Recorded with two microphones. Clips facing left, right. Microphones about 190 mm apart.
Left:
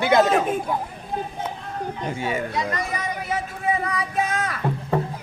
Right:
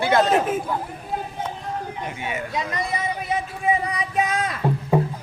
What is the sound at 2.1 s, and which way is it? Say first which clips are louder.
Speech: left 4 dB; 30° left (ahead or behind).